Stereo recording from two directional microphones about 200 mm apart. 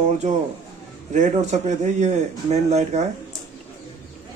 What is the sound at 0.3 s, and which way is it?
Speech, 35° right (ahead or behind).